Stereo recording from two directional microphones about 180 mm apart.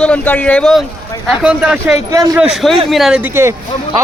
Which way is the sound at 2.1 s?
20° right (ahead or behind).